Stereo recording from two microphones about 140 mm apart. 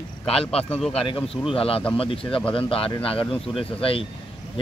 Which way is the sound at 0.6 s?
10° left (ahead or behind).